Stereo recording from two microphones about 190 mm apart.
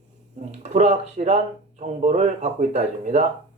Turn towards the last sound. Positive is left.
turn(degrees=-35)  # may be behind; listen again after turning